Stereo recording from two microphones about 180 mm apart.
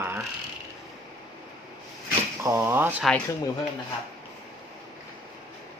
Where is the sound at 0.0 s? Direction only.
10° right (ahead or behind).